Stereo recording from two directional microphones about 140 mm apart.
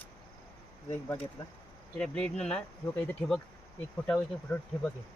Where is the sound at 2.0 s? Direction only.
5° left (ahead or behind).